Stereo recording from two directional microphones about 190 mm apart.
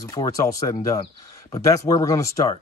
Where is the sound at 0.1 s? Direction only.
20° left (ahead or behind).